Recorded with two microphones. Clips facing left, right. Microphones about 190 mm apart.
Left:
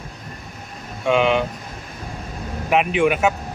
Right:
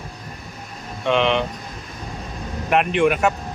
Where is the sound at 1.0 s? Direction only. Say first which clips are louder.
Left 1 dB; 5° left (ahead or behind).